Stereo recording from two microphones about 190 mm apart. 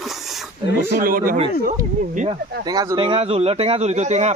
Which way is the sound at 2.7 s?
20° right (ahead or behind).